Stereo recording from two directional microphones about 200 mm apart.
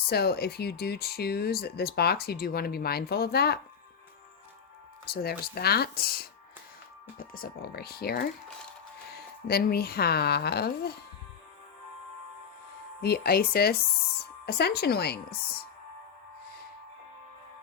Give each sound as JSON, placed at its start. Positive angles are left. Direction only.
{"t": 0.1, "sound": "speech", "side_deg": 50}
{"t": 5.1, "sound": "speech", "side_deg": 50}
{"t": 9.5, "sound": "speech", "side_deg": 50}
{"t": 13.0, "sound": "speech", "side_deg": 50}